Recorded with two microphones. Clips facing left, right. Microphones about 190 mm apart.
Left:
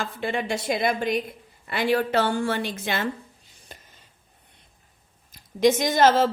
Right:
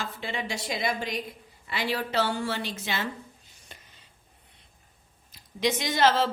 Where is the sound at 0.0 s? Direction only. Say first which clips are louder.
Left 6 dB; 55° left (ahead or behind).